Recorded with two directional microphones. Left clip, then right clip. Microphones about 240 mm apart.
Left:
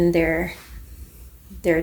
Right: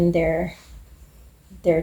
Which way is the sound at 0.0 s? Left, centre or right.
Left.